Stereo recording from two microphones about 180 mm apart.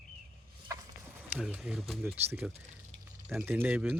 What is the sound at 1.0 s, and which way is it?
Speech, 5° right (ahead or behind).